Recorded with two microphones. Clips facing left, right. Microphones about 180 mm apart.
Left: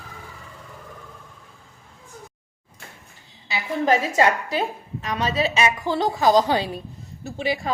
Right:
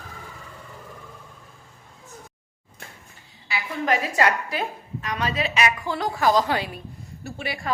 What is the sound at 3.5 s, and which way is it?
A woman's voice, 25° left (ahead or behind).